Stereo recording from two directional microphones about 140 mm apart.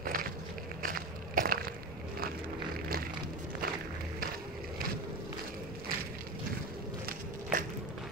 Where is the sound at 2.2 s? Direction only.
90° right.